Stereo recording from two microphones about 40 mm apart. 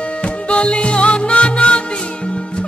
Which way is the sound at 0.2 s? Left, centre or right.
Left.